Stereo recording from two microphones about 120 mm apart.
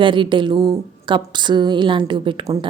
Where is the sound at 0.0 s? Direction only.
45° right (ahead or behind).